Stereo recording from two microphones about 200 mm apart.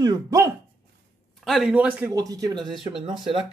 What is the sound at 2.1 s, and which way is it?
Speech, 15° right (ahead or behind).